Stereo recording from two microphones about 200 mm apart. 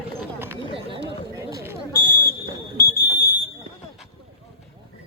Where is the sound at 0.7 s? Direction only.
25° right (ahead or behind).